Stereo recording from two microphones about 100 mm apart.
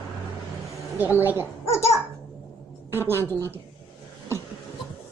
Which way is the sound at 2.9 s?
25° right (ahead or behind).